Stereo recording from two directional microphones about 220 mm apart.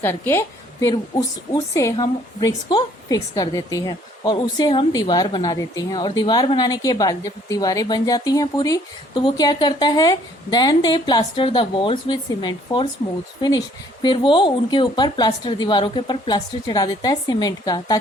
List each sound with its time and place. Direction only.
0.0 s a woman's voice: 10° left (ahead or behind)
14.0 s a woman's voice: 20° left (ahead or behind)